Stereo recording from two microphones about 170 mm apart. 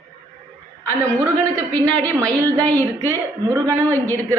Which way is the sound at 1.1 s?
20° right (ahead or behind).